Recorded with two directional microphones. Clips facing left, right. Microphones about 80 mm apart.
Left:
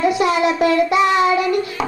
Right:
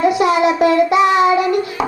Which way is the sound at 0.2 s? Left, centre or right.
Centre.